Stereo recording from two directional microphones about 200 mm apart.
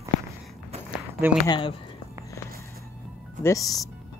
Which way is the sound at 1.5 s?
25° left (ahead or behind).